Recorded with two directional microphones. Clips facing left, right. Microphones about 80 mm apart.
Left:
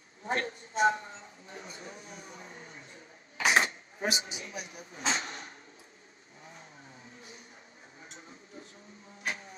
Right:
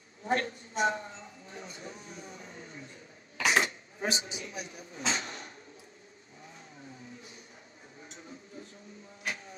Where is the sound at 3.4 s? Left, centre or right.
Left.